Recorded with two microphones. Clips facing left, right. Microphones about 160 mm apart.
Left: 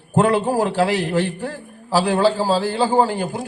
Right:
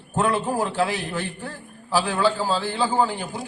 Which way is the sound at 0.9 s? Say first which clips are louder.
Left 7 dB; 75° left (ahead or behind).